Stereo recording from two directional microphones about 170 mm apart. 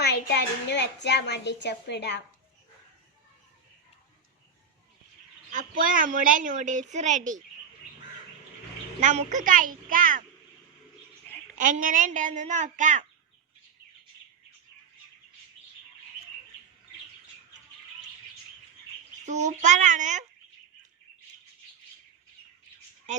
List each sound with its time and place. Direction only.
0.0 s a woman's voice: 75° left (ahead or behind)
5.5 s a woman's voice: 50° right (ahead or behind)
9.0 s a woman's voice: 45° right (ahead or behind)
11.5 s a woman's voice: 50° right (ahead or behind)
19.2 s a woman's voice: 45° right (ahead or behind)
23.1 s speech: 45° right (ahead or behind)